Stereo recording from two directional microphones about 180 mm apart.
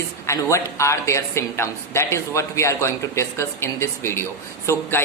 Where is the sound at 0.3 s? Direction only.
15° left (ahead or behind).